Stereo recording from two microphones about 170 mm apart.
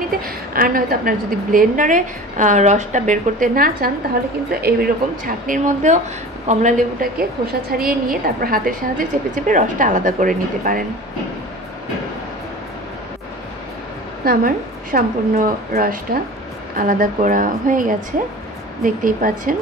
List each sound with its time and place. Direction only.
0.2 s a woman's voice: 55° right (ahead or behind)
5.2 s a woman's voice: 50° right (ahead or behind)
14.2 s a woman's voice: 60° right (ahead or behind)